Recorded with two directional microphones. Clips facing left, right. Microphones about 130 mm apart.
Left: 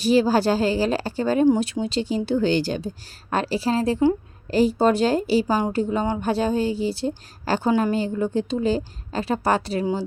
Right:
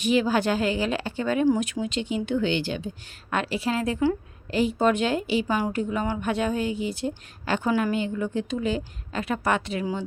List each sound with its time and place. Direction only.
0.0 s a woman's voice: 35° left (ahead or behind)